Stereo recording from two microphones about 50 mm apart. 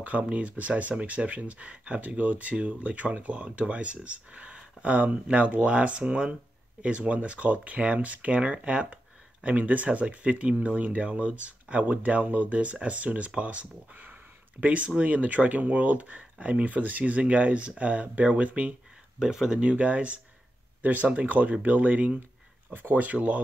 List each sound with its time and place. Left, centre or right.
0.0 s speech: right
19.1 s speech: centre
19.6 s speech: right